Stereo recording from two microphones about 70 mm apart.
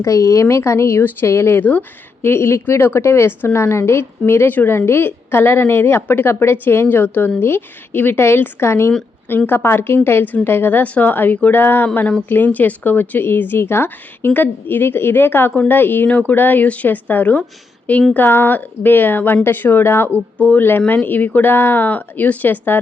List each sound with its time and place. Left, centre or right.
0.0 s speech: left